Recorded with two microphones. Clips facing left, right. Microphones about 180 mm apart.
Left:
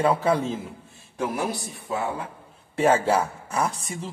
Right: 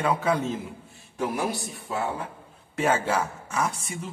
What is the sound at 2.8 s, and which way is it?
Speech, 35° left (ahead or behind).